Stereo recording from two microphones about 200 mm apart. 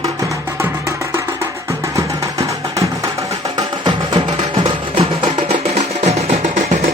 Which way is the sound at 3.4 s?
25° right (ahead or behind).